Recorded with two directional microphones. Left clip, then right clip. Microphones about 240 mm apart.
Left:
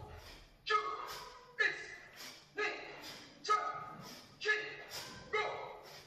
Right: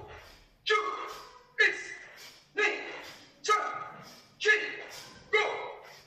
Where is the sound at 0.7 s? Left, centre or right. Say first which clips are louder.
Right 6 dB; right.